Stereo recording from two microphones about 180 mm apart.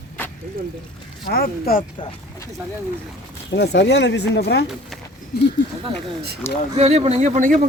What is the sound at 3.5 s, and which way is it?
Speech, 70° left (ahead or behind).